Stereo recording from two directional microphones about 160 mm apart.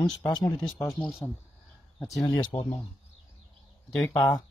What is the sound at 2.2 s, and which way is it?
Speech, 25° left (ahead or behind).